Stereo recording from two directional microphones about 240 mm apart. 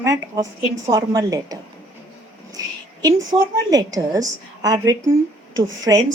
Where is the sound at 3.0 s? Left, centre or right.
Centre.